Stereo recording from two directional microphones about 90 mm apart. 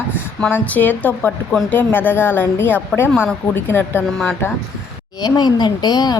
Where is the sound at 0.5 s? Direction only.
20° left (ahead or behind).